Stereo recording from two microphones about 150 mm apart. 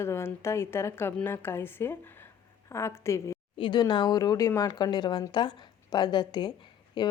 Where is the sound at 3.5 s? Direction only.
30° left (ahead or behind).